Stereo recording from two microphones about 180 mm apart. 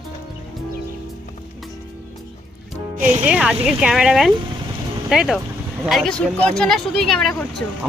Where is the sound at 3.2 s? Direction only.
5° right (ahead or behind).